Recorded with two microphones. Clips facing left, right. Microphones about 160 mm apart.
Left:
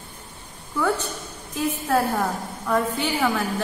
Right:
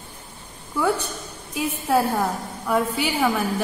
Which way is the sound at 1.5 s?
10° right (ahead or behind).